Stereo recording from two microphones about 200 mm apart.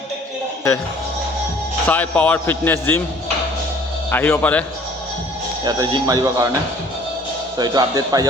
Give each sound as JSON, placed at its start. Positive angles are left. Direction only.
{"t": 1.9, "sound": "a man's voice", "side_deg": 10}
{"t": 4.1, "sound": "a man's voice", "side_deg": 10}
{"t": 5.6, "sound": "speech", "side_deg": -20}
{"t": 7.6, "sound": "speech", "side_deg": -20}